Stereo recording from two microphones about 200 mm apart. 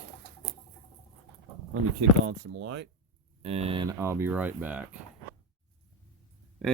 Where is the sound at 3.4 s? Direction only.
30° right (ahead or behind); by 4.8 s 10° right (ahead or behind).